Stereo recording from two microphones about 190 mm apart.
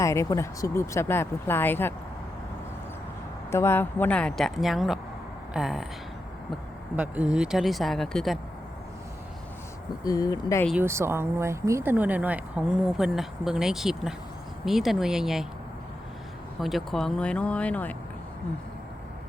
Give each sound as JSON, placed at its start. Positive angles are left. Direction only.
{"t": 0.0, "sound": "speech", "side_deg": 15}
{"t": 3.5, "sound": "a woman's voice", "side_deg": 15}
{"t": 6.9, "sound": "a woman's voice", "side_deg": -5}
{"t": 10.0, "sound": "speech", "side_deg": 20}
{"t": 10.7, "sound": "a woman's voice", "side_deg": -10}
{"t": 16.6, "sound": "a woman's voice", "side_deg": 0}